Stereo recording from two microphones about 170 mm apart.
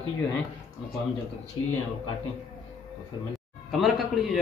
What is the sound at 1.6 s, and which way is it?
Speech, 25° left (ahead or behind).